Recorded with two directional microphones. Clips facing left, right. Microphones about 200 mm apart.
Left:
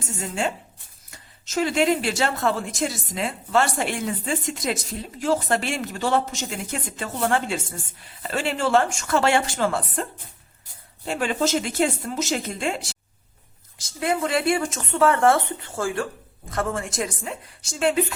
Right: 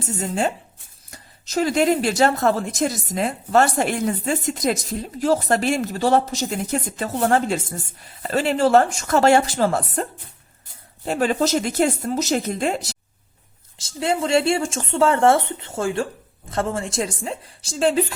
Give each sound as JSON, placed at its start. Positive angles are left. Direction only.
{"t": 0.2, "sound": "speech", "side_deg": -40}
{"t": 13.7, "sound": "speech", "side_deg": -25}